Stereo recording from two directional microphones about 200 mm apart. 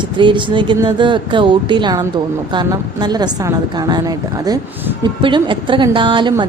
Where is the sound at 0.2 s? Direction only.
25° right (ahead or behind).